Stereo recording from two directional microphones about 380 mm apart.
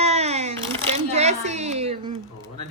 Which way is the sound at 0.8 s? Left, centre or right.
Centre.